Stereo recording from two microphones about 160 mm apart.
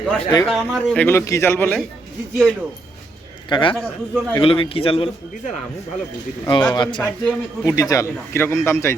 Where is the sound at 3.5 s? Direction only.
30° left (ahead or behind).